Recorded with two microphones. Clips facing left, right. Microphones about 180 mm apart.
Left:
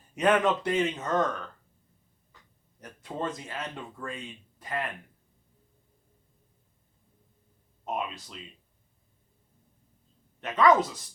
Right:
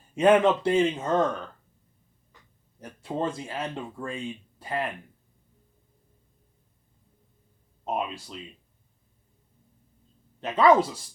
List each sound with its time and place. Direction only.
0.1 s speech: 30° right (ahead or behind)
2.8 s speech: 30° right (ahead or behind)
7.9 s speech: 30° right (ahead or behind)
10.4 s speech: 30° right (ahead or behind)